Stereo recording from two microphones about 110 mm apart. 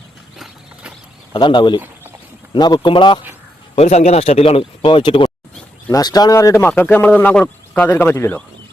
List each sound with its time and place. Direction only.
0.3 s clip-clop: 5° right (ahead or behind)
1.3 s speech: 45° left (ahead or behind)
3.8 s speech: 85° left; by 5.3 s 50° left (ahead or behind)
5.9 s speech: 35° left (ahead or behind); by 8.1 s 15° left (ahead or behind)